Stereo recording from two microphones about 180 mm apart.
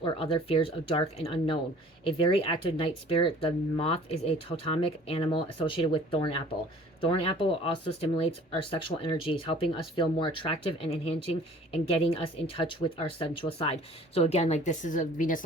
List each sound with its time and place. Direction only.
0.0 s speech: 30° left (ahead or behind); by 15.4 s 50° left (ahead or behind)